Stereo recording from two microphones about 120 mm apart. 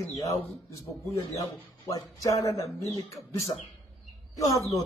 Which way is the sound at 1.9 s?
25° left (ahead or behind).